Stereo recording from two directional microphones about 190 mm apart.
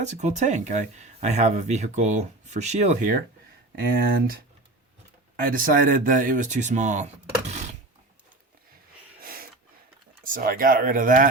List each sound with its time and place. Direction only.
0.0 s speech: 40° right (ahead or behind)
3.8 s speech: 50° right (ahead or behind)
5.4 s speech: 45° right (ahead or behind)
9.2 s a sound: 50° right (ahead or behind)
10.3 s speech: 50° right (ahead or behind)